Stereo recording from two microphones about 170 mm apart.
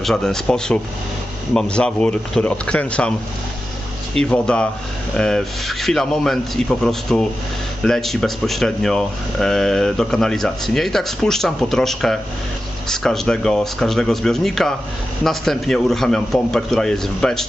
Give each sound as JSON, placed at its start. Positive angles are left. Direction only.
{"t": 0.0, "sound": "speech", "side_deg": 0}
{"t": 4.1, "sound": "speech", "side_deg": 5}